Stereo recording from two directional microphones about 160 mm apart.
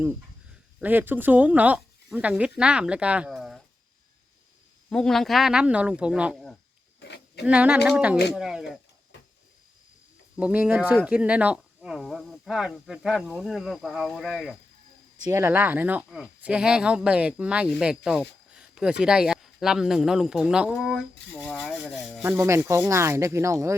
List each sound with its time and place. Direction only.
0.8 s speech: 10° right (ahead or behind)
4.9 s speech: 5° left (ahead or behind)
7.0 s a sound: 90° left
7.4 s speech: 10° right (ahead or behind)
10.3 s speech: 10° right (ahead or behind)
15.3 s speech: 15° right (ahead or behind); by 22.2 s 5° left (ahead or behind)
22.2 s speech: 15° right (ahead or behind)